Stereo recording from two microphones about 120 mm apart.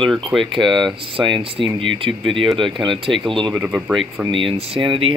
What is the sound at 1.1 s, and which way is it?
Speech, 45° right (ahead or behind).